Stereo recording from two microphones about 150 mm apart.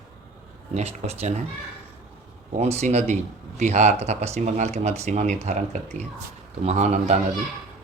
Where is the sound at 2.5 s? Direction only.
45° right (ahead or behind).